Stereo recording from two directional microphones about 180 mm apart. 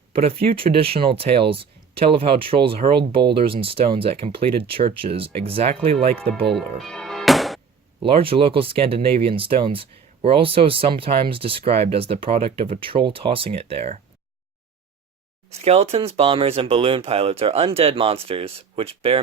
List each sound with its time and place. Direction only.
0.1 s speech: 30° right (ahead or behind)
6.5 s music: centre (ahead or behind)
8.0 s speech: 30° right (ahead or behind)
15.4 s speech: 35° right (ahead or behind)